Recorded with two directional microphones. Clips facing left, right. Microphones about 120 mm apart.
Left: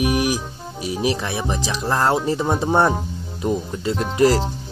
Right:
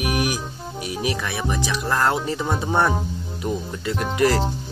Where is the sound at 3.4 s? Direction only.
25° left (ahead or behind).